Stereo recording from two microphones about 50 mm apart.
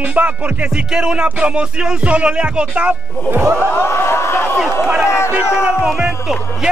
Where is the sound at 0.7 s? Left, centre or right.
Centre.